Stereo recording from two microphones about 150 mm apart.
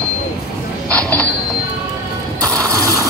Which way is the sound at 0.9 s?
10° left (ahead or behind).